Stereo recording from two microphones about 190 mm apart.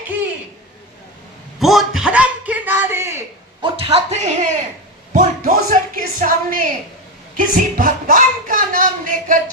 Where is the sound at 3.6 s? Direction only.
30° right (ahead or behind).